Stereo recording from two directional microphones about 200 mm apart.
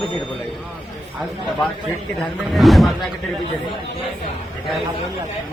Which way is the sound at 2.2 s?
Centre (ahead or behind).